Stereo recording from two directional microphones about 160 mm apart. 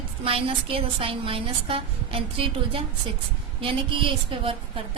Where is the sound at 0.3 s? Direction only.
35° right (ahead or behind).